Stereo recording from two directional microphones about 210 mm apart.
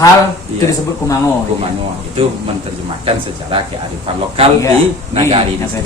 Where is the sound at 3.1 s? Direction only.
25° right (ahead or behind).